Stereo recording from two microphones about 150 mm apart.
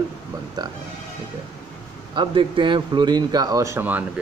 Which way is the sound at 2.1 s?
35° right (ahead or behind).